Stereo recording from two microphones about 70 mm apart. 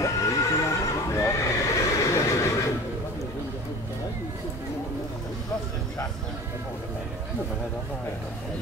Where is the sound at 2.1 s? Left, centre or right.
Left.